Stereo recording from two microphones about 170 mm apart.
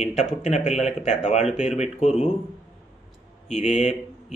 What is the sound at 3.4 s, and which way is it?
Speech, 40° left (ahead or behind).